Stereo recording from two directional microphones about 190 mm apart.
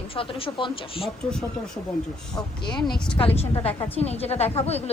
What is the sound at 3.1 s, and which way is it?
A woman's voice, 30° left (ahead or behind).